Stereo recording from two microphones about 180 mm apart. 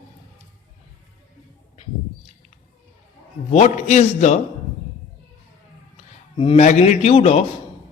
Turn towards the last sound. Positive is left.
turn(degrees=35)  # may be behind; listen again after turning